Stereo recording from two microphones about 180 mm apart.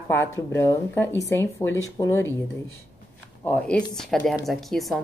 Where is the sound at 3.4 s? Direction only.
10° left (ahead or behind).